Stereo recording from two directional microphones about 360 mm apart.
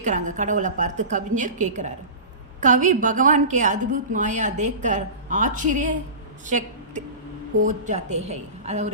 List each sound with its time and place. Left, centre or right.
0.0 s a woman's voice: right